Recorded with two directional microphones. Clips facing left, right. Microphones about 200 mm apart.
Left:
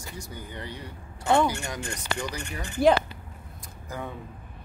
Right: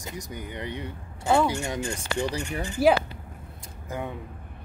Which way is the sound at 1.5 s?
25° right (ahead or behind).